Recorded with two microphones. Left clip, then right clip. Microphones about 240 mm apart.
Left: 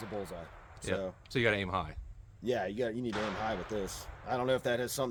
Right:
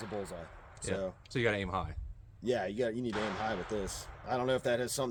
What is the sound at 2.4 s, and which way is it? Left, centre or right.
Speech, centre.